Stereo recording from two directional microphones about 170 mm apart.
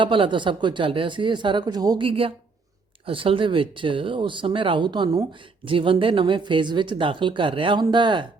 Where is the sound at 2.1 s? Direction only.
35° right (ahead or behind).